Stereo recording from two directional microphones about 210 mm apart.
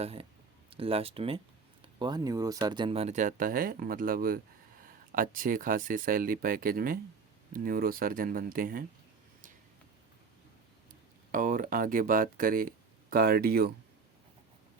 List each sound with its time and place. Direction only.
0.0 s speech: 25° right (ahead or behind)
11.3 s speech: 40° right (ahead or behind)